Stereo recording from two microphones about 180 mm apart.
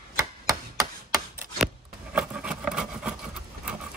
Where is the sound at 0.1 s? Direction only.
15° right (ahead or behind).